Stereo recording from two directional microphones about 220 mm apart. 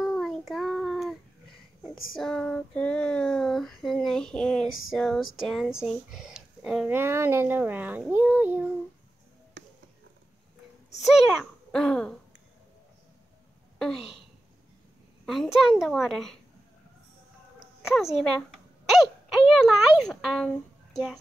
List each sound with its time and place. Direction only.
0.0 s child singing: centre (ahead or behind)
2.1 s child singing: 5° left (ahead or behind)
9.6 s a sound: 50° right (ahead or behind)
11.7 s child singing: 5° left (ahead or behind)
15.2 s child singing: centre (ahead or behind)
17.8 s speech: centre (ahead or behind)